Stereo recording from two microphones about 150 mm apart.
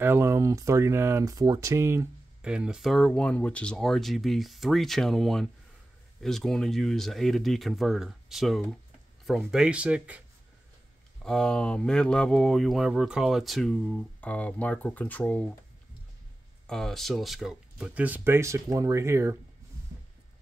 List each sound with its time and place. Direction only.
0.0 s speech: 15° right (ahead or behind)
2.4 s speech: 5° right (ahead or behind)
11.2 s speech: 5° left (ahead or behind)
16.6 s speech: 5° left (ahead or behind); by 19.3 s 20° right (ahead or behind)